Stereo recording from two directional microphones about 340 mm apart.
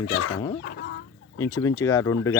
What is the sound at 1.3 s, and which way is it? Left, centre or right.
Speech, centre.